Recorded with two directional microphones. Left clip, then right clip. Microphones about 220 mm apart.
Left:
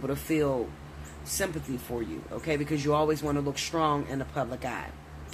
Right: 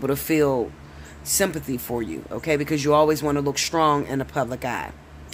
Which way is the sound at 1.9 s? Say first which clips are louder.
Right 6 dB; 50° right (ahead or behind).